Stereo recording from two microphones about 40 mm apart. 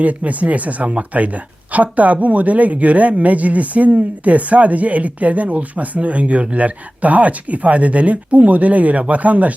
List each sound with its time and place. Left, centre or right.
0.0 s speech: right